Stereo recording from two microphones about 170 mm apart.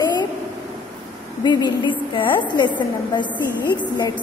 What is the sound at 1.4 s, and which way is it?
A woman's voice, 25° left (ahead or behind).